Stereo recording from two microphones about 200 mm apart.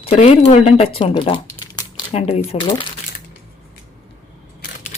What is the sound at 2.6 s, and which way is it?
Speech, 20° left (ahead or behind).